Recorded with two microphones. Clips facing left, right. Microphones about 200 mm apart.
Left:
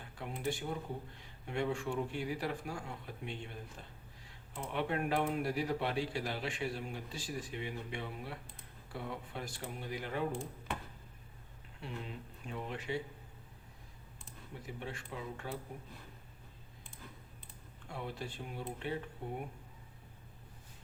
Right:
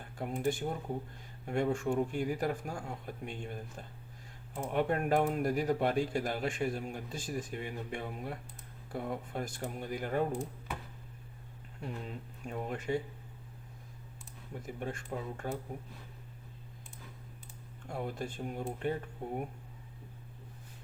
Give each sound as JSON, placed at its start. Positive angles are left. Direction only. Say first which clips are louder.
{"t": 0.0, "sound": "speech", "louder": "right 6 dB", "side_deg": -50}
{"t": 11.8, "sound": "speech", "louder": "right 3 dB", "side_deg": -45}
{"t": 14.6, "sound": "speech", "louder": "right 5 dB", "side_deg": -50}
{"t": 17.8, "sound": "speech", "louder": "right 5 dB", "side_deg": -45}